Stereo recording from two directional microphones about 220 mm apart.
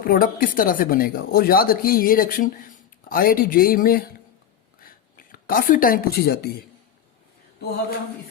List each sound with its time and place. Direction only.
0.0 s speech: 40° left (ahead or behind)